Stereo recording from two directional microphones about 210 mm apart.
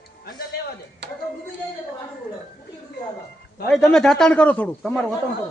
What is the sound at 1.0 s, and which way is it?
Tick-tock, 55° right (ahead or behind).